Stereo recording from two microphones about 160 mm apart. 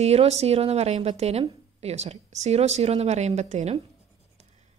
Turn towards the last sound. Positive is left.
turn(degrees=-45)  # may be behind; listen again after turning